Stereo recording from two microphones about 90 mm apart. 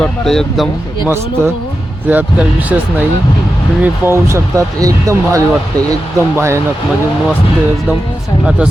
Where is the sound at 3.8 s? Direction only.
25° right (ahead or behind).